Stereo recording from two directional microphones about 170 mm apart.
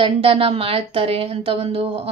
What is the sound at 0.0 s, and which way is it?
A woman's voice, 35° right (ahead or behind).